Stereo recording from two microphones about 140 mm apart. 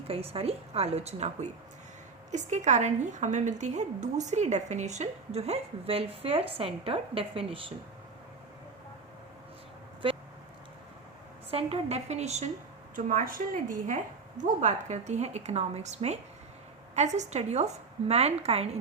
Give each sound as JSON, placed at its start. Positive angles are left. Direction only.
{"t": 0.1, "sound": "a woman's voice", "side_deg": -45}
{"t": 10.0, "sound": "a sound", "side_deg": -40}
{"t": 11.5, "sound": "a woman's voice", "side_deg": -45}
{"t": 13.1, "sound": "a woman's voice", "side_deg": -75}